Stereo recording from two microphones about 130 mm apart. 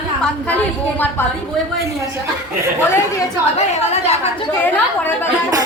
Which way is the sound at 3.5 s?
55° left (ahead or behind).